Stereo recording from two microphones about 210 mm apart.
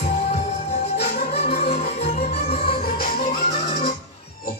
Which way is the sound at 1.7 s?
30° left (ahead or behind).